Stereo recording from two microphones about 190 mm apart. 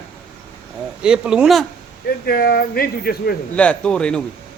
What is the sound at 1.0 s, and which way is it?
Speech, 5° right (ahead or behind).